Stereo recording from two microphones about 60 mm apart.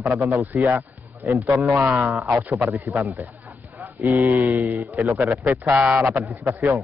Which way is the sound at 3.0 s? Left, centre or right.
Right.